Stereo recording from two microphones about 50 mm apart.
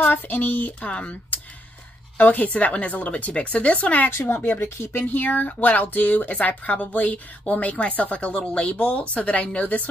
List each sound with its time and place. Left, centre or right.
0.0 s speech: left
0.7 s speech: left